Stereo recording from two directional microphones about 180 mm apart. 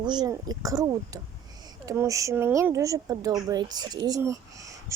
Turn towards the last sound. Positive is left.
turn(degrees=-20)  # may be behind; listen again after turning